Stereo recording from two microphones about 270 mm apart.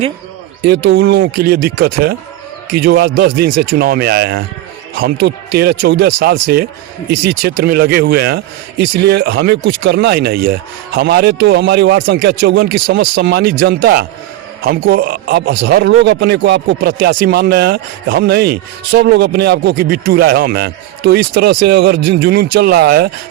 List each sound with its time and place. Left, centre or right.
0.9 s a man's voice: right
7.6 s a man's voice: right